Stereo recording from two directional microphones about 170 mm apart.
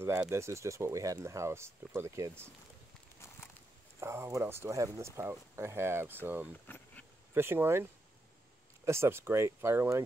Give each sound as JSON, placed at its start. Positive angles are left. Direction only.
{"t": 0.3, "sound": "speech", "side_deg": -15}
{"t": 4.0, "sound": "speech", "side_deg": -15}